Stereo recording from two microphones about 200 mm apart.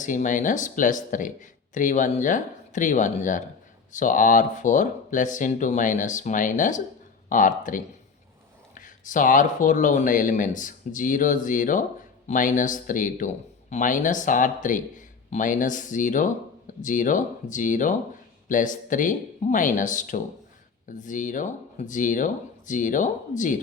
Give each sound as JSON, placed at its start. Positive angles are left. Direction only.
{"t": 0.0, "sound": "speech", "side_deg": 40}